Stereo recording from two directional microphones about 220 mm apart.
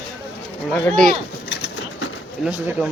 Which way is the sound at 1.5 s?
50° left (ahead or behind).